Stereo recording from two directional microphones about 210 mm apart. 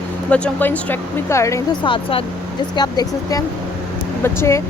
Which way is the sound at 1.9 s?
25° left (ahead or behind).